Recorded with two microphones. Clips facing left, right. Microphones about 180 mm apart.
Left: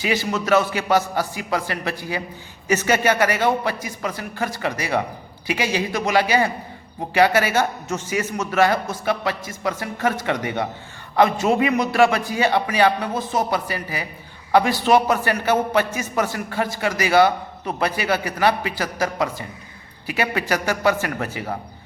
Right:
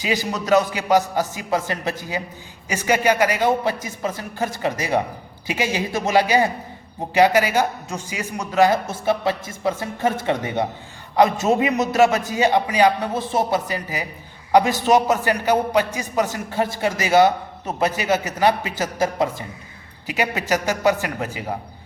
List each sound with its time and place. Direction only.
0.0 s a man's voice: 15° right (ahead or behind)